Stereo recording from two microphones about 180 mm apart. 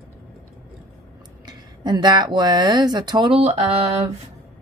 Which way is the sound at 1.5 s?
25° right (ahead or behind).